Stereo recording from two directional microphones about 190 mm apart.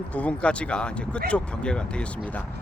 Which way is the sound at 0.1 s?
5° left (ahead or behind).